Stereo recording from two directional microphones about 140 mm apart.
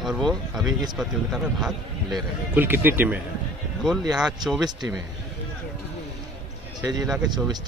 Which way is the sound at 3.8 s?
Centre (ahead or behind).